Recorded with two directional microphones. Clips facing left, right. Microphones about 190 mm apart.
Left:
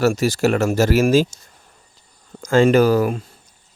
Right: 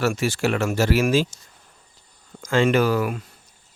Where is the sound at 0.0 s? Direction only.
40° left (ahead or behind).